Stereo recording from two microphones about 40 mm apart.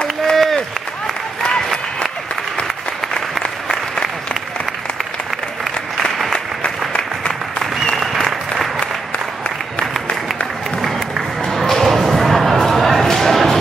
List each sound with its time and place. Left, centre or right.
0.3 s run: centre
3.2 s applause: centre
7.0 s applause: centre
11.7 s thump: centre
12.6 s a sound: centre